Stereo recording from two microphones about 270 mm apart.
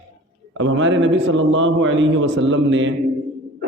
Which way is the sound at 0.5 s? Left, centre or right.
Right.